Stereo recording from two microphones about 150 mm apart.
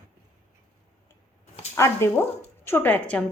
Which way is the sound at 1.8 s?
20° left (ahead or behind).